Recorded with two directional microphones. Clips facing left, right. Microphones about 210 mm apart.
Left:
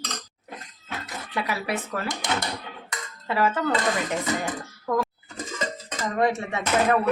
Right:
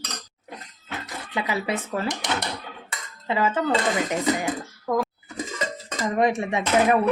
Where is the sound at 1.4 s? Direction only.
20° right (ahead or behind).